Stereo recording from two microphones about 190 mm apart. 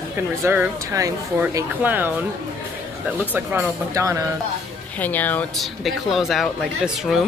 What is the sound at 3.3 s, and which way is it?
Speech, 15° right (ahead or behind).